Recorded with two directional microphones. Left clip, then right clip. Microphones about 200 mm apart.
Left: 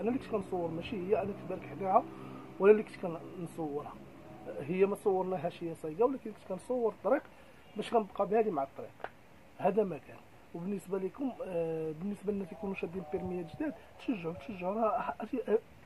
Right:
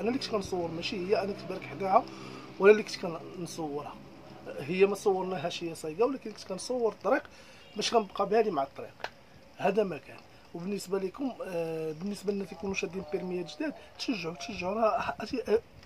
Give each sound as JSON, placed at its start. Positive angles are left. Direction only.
{"t": 0.0, "sound": "speech", "side_deg": -10}